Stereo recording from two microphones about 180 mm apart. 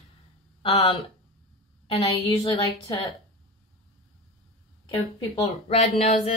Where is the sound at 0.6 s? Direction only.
35° left (ahead or behind).